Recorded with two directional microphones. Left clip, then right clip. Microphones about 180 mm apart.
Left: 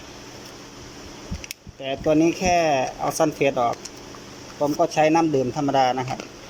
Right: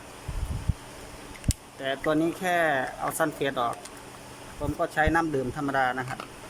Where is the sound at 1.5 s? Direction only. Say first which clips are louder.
Left 1 dB; 10° left (ahead or behind).